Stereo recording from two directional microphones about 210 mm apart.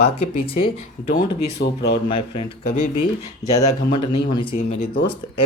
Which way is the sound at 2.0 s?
25° left (ahead or behind).